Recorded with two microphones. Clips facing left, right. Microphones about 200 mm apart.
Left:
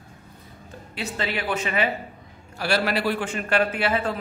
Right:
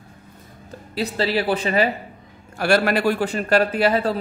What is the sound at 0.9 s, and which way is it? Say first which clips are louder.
Speech: right 7 dB; 35° right (ahead or behind).